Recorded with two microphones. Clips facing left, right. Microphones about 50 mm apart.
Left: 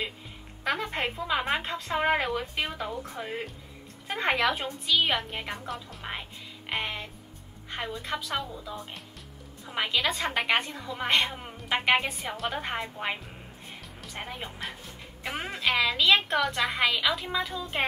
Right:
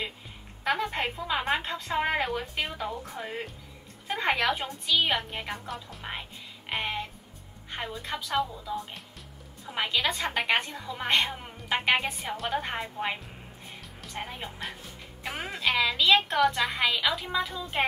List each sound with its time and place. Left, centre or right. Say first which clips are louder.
0.7 s a woman's voice: right 1 dB; centre
1.6 s speech: left 1 dB; centre
2.2 s a woman's voice: left 1 dB; centre
4.6 s a woman's voice: left 1 dB; centre
6.7 s music: right 1 dB; centre
7.7 s a woman's voice: left 1 dB; centre
11.3 s music: even; centre
12.2 s a woman's voice: right 1 dB; centre
15.2 s music: left 1 dB; centre
15.5 s a woman's voice: even; centre